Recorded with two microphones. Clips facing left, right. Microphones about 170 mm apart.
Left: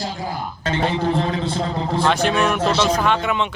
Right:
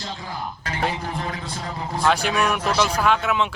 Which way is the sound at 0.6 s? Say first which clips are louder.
Left 7 dB; 25° left (ahead or behind).